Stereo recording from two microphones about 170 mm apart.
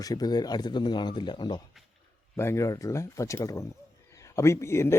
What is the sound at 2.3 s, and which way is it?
Speech, 15° left (ahead or behind).